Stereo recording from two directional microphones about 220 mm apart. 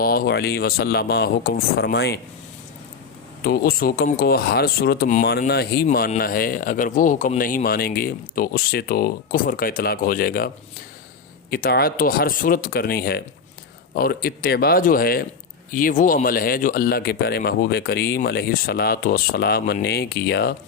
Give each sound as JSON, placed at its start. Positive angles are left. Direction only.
{"t": 0.0, "sound": "a man's voice", "side_deg": 40}
{"t": 3.4, "sound": "speech", "side_deg": 45}
{"t": 11.5, "sound": "a man's voice", "side_deg": 40}